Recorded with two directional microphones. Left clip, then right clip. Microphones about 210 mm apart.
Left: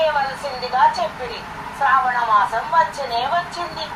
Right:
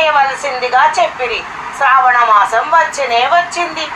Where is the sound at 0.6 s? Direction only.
30° right (ahead or behind).